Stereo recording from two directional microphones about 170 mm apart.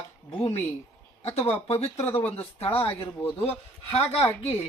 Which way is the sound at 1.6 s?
35° left (ahead or behind).